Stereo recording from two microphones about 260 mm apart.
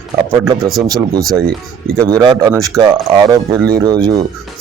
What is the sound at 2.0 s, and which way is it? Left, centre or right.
Speech, centre.